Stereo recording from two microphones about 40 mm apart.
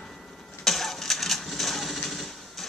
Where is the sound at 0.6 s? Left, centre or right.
Centre.